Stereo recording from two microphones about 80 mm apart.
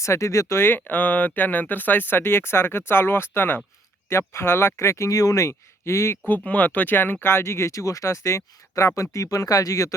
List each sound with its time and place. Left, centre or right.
0.0 s speech: left
6.2 s speech: left